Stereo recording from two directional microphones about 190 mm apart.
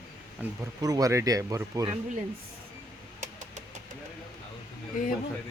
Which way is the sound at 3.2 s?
40° right (ahead or behind).